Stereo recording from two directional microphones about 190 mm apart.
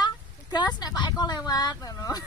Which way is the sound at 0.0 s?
20° left (ahead or behind).